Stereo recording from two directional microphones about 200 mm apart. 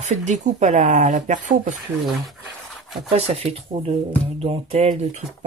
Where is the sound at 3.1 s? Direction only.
30° right (ahead or behind).